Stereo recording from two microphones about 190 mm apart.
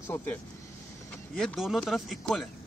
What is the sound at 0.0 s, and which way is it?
Speech, 10° left (ahead or behind).